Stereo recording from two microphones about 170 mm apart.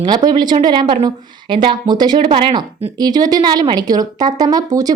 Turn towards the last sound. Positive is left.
turn(degrees=-20)  # may be behind; listen again after turning